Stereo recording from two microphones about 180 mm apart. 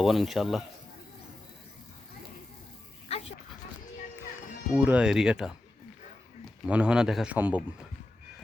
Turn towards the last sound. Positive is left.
turn(degrees=-10)  # may be behind; listen again after turning